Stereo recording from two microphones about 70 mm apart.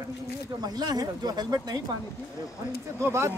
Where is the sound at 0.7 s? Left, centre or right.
Right.